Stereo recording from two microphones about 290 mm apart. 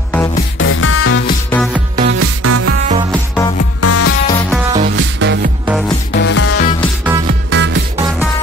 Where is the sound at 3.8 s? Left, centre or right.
Left.